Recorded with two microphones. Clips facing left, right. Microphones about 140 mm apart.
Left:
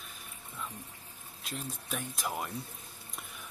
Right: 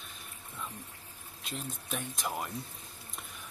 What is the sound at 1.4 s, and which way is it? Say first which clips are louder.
Speech: even; centre (ahead or behind).